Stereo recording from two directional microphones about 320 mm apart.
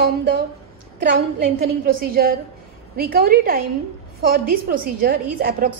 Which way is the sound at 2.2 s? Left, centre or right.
Right.